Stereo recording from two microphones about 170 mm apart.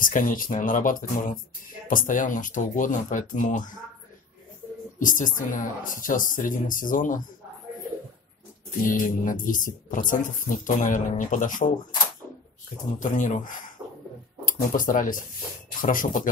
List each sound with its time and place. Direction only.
0.0 s speech: 50° left (ahead or behind)
4.9 s speech: 50° left (ahead or behind)
8.8 s speech: 50° left (ahead or behind)
13.0 s speech: 45° left (ahead or behind)